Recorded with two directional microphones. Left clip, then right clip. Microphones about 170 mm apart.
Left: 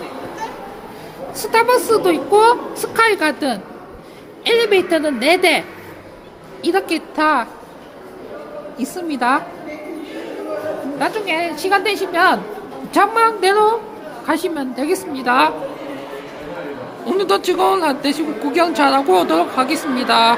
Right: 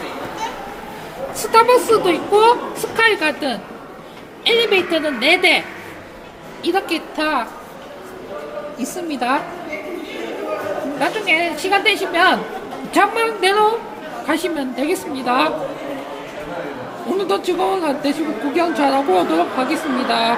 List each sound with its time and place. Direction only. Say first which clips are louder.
1.5 s a woman's voice: right 2 dB; 10° left (ahead or behind)
2.0 s a woman's voice: left 1 dB; 20° left (ahead or behind)
8.8 s a woman's voice: left 4 dB; 15° left (ahead or behind)
11.0 s a woman's voice: right 2 dB; 5° left (ahead or behind)
17.1 s a man's voice: left 3 dB; 5° left (ahead or behind)